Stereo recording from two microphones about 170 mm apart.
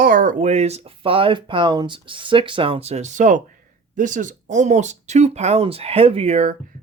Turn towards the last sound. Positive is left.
turn(degrees=-40)  # may be behind; listen again after turning